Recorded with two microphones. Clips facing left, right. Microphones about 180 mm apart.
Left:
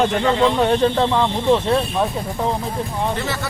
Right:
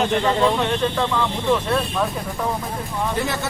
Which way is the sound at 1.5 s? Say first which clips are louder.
Left 3 dB; 30° left (ahead or behind).